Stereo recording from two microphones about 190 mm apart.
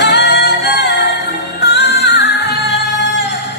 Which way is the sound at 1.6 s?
60° left (ahead or behind).